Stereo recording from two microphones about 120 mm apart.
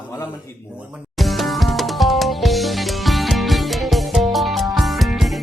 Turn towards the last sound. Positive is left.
turn(degrees=0)  # may be behind; listen again after turning